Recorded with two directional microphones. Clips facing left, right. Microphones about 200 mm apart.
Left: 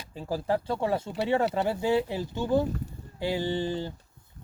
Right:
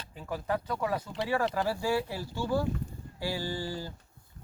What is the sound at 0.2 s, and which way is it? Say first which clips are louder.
Speech: left 5 dB; 30° left (ahead or behind).